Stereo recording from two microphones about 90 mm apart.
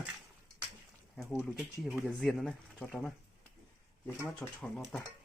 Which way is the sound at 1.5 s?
5° right (ahead or behind).